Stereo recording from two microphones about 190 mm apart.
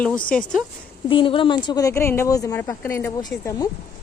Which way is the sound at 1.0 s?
25° left (ahead or behind).